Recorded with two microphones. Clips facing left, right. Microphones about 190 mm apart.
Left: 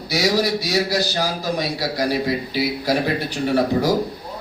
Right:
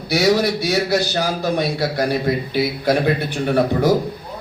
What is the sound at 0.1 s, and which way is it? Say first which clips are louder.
A man's voice: right 3 dB; 55° right (ahead or behind).